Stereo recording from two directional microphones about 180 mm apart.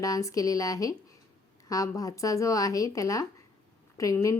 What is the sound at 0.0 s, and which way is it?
Speech, 20° left (ahead or behind).